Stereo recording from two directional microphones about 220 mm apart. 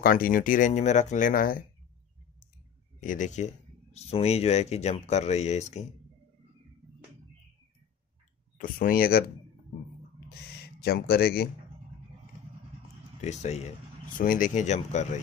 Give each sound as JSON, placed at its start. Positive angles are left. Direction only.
{"t": 0.0, "sound": "speech", "side_deg": 40}
{"t": 3.0, "sound": "speech", "side_deg": 35}
{"t": 8.5, "sound": "speech", "side_deg": 40}
{"t": 10.8, "sound": "speech", "side_deg": 45}
{"t": 13.2, "sound": "speech", "side_deg": 30}